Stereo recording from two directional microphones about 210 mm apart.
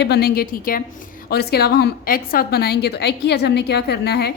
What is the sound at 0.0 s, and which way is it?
A woman's voice, 50° left (ahead or behind).